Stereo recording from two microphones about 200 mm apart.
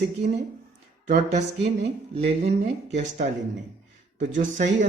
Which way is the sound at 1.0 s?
35° right (ahead or behind).